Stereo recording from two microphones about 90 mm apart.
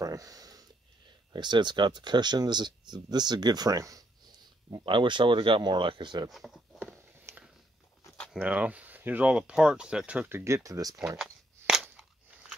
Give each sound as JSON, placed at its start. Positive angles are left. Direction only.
{"t": 0.0, "sound": "speech", "side_deg": -40}
{"t": 1.3, "sound": "speech", "side_deg": -55}
{"t": 4.8, "sound": "speech", "side_deg": -65}
{"t": 6.3, "sound": "a sound", "side_deg": 0}
{"t": 7.2, "sound": "a sound", "side_deg": -20}
{"t": 8.4, "sound": "speech", "side_deg": -15}
{"t": 10.3, "sound": "speech", "side_deg": -35}
{"t": 11.1, "sound": "cap gun", "side_deg": -5}